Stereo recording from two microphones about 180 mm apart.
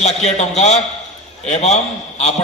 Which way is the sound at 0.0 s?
40° left (ahead or behind).